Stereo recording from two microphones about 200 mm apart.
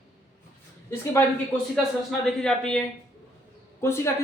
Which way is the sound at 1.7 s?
Centre (ahead or behind).